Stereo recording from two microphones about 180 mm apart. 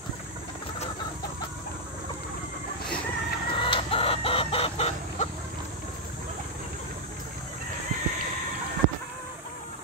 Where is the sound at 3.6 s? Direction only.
30° left (ahead or behind).